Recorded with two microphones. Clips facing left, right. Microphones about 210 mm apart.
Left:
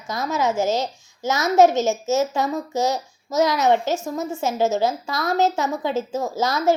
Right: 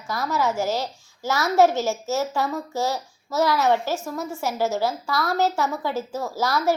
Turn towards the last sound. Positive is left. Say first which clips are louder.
# left 2 dB
turn(degrees=20)  # may be behind; listen again after turning